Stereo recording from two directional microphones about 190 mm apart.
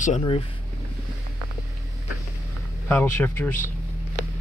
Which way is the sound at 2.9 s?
10° left (ahead or behind).